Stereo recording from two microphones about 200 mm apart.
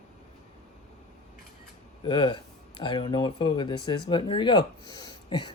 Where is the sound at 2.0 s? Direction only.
25° left (ahead or behind).